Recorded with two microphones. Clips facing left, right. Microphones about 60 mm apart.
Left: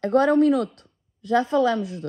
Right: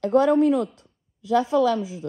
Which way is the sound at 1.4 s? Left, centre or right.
Left.